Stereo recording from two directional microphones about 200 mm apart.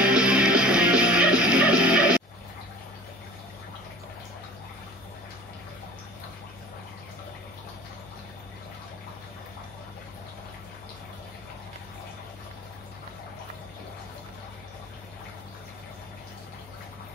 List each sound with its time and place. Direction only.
0.0 s music: 5° right (ahead or behind)